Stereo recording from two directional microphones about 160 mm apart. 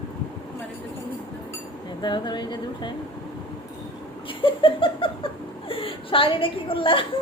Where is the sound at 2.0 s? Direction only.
30° left (ahead or behind).